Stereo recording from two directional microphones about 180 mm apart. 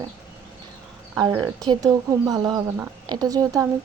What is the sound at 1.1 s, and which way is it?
Speech, 15° right (ahead or behind).